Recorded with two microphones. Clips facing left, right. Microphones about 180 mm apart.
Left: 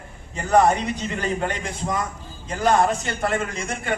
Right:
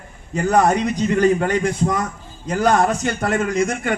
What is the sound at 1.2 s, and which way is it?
A man's voice, 40° right (ahead or behind).